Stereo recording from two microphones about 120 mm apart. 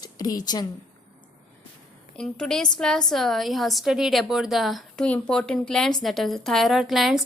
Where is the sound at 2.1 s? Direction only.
5° left (ahead or behind).